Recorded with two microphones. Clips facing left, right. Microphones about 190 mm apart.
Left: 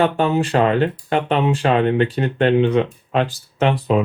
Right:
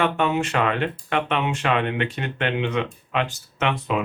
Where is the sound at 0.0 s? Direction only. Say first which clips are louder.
Left 4 dB; 35° left (ahead or behind).